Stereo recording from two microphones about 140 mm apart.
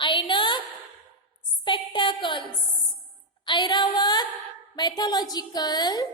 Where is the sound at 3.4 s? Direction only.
35° left (ahead or behind).